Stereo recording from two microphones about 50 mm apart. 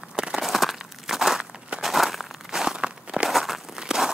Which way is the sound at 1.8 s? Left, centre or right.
Centre.